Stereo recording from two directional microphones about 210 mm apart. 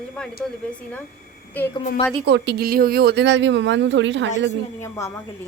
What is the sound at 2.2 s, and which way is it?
Speech, 55° right (ahead or behind).